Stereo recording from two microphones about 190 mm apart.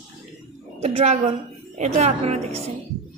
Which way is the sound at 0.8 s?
35° right (ahead or behind).